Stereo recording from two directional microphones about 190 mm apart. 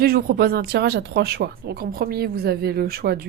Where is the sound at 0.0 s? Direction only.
50° right (ahead or behind).